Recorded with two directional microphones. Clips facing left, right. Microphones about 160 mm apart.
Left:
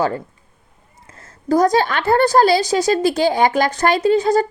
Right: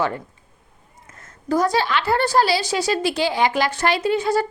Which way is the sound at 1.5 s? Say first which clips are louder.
Left 4 dB; 45° left (ahead or behind).